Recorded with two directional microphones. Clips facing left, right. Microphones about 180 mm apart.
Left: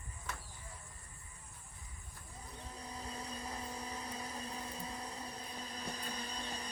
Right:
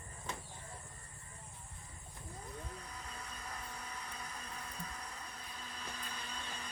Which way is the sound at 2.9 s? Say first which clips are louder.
Left 5 dB; 30° left (ahead or behind).